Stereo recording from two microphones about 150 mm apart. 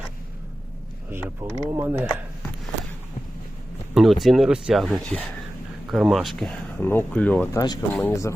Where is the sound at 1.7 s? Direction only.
15° right (ahead or behind).